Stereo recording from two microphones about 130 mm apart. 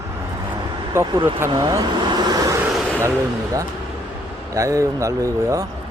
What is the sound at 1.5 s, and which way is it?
Vehicle, 30° right (ahead or behind).